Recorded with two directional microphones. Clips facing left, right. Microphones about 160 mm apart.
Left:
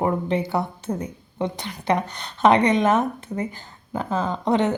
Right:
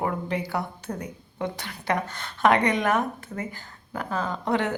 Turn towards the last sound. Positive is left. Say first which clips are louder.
# left 5 dB
turn(degrees=20)  # may be behind; listen again after turning